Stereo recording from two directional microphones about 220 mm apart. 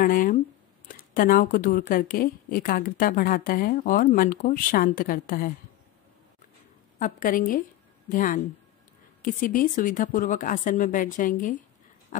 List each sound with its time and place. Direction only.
0.0 s a woman's voice: 40° left (ahead or behind)
7.0 s a woman's voice: 40° left (ahead or behind)